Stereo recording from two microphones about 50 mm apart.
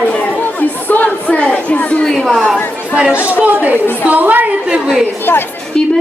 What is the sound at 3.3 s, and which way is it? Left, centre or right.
A woman's voice, right.